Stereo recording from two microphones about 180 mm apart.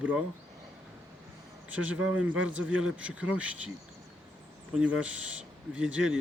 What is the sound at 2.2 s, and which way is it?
Speech, 90° right.